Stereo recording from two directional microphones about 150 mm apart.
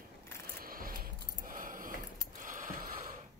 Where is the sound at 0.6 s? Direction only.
75° right (ahead or behind).